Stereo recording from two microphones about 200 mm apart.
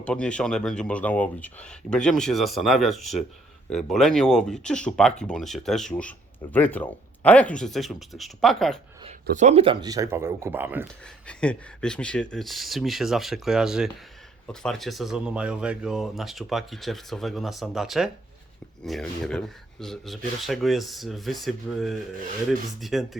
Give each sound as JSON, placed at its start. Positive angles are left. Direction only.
{"t": 0.0, "sound": "speech", "side_deg": 5}
{"t": 9.2, "sound": "speech", "side_deg": -40}
{"t": 11.3, "sound": "speech", "side_deg": 5}